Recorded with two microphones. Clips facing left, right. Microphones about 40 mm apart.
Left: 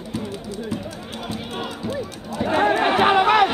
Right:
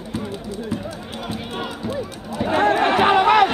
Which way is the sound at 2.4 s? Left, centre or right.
Centre.